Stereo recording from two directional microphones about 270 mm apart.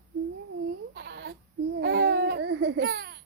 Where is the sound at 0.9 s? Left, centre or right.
Right.